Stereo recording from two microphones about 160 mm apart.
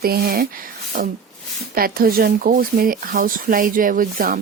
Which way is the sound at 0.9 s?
55° right (ahead or behind).